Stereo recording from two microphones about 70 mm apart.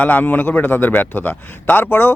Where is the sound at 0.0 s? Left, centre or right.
Left.